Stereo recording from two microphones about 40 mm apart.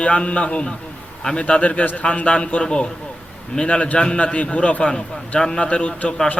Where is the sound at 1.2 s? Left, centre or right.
Centre.